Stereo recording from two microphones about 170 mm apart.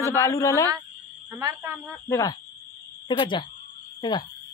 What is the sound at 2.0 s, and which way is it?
A man's voice, 20° left (ahead or behind).